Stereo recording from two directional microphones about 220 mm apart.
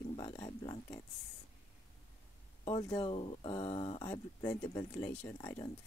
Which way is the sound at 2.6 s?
25° left (ahead or behind).